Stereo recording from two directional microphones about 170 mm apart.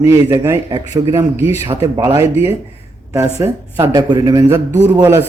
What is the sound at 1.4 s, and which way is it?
Speech, 40° left (ahead or behind).